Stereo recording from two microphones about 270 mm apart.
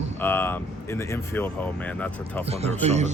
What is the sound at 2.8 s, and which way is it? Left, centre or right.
Speech, right.